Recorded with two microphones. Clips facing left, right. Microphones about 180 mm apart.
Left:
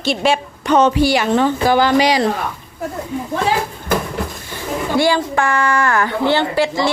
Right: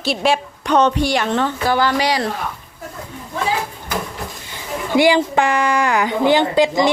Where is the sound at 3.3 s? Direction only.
70° left (ahead or behind).